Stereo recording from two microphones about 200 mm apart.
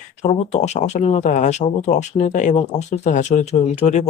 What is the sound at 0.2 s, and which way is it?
Speech, 35° left (ahead or behind).